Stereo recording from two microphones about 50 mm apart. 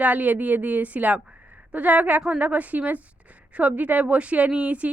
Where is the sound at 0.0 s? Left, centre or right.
Right.